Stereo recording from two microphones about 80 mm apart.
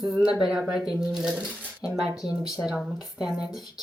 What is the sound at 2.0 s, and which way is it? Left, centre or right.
Speech, centre.